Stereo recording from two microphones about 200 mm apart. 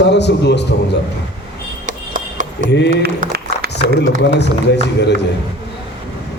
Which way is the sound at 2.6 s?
60° left (ahead or behind).